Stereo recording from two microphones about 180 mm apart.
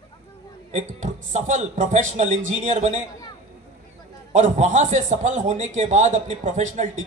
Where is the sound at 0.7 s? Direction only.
40° right (ahead or behind).